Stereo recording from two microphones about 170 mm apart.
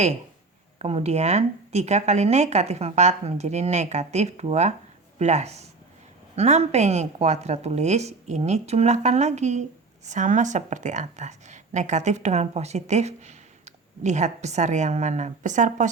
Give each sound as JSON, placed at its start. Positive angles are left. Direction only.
{"t": 0.8, "sound": "a woman's voice", "side_deg": -35}